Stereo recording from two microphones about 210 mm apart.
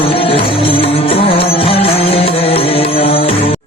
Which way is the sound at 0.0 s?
25° left (ahead or behind).